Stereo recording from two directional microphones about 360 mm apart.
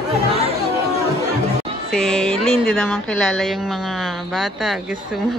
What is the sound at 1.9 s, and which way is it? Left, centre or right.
Speech, centre.